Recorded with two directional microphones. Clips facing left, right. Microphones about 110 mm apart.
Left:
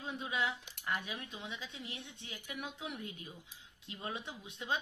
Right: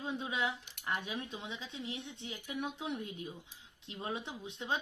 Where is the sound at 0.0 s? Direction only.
25° right (ahead or behind).